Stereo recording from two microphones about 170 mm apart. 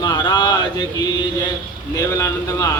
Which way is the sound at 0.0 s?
25° left (ahead or behind).